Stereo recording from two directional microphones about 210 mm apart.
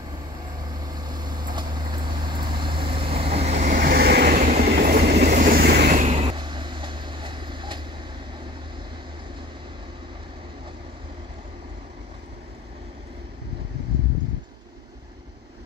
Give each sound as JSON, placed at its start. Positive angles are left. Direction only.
{"t": 0.7, "sound": "vehicle", "side_deg": -20}